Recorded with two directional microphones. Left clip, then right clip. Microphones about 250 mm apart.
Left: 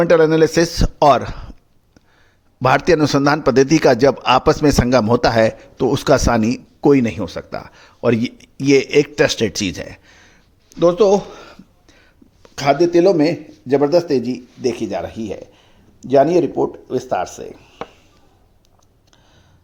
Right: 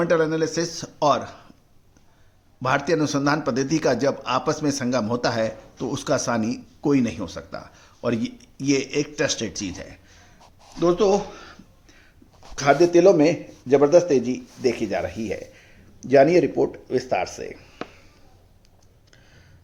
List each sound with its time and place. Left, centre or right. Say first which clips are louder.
0.0 s a man's voice: left 9 dB; left
2.6 s a man's voice: left 8 dB; left
10.8 s a sound: left 6 dB; left
12.5 s a man's voice: left 3 dB; left
16.9 s a man's voice: left 3 dB; centre